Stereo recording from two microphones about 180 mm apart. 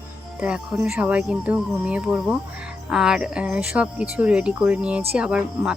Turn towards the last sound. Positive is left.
turn(degrees=-5)  # may be behind; listen again after turning